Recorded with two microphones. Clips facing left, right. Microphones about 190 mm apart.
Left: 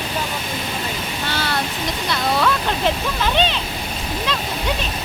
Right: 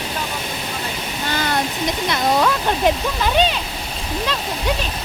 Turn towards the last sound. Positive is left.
turn(degrees=-10)  # may be behind; listen again after turning